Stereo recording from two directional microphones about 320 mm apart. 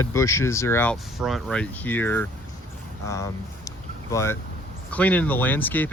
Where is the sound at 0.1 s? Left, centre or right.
Centre.